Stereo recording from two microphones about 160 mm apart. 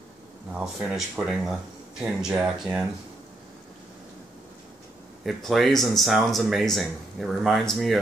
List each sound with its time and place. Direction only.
0.5 s speech: 5° right (ahead or behind)
5.2 s speech: centre (ahead or behind)